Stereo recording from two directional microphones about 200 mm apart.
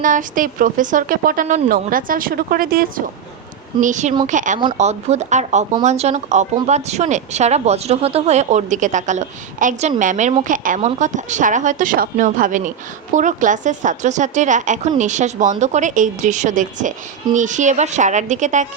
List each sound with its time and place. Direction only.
0.0 s a woman's voice: 40° right (ahead or behind)